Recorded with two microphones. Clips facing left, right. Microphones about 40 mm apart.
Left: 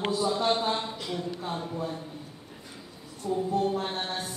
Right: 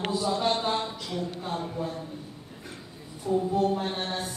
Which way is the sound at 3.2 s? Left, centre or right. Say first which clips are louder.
Right 3 dB; centre.